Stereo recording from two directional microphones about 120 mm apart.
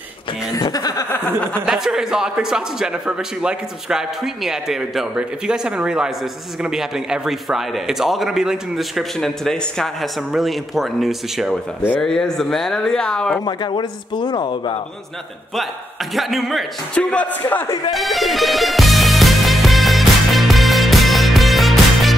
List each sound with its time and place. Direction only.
0.5 s speech: 30° left (ahead or behind)
1.1 s speech: 10° left (ahead or behind)
1.7 s a man's voice: 5° right (ahead or behind)
13.5 s speech: 40° left (ahead or behind)
16.2 s a man's voice: centre (ahead or behind)
16.9 s speech: 10° left (ahead or behind)
17.9 s music: centre (ahead or behind)